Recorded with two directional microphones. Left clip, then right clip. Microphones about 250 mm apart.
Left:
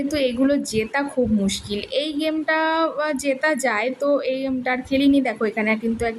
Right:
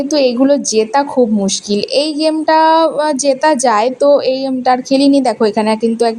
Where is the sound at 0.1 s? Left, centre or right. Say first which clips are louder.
Right 10 dB; centre.